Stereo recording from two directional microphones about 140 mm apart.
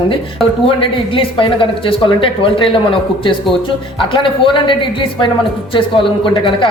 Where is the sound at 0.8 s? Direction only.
40° left (ahead or behind).